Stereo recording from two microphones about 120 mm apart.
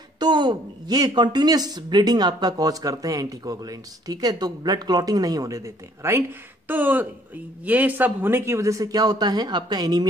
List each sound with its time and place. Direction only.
0.2 s a woman's voice: 40° right (ahead or behind)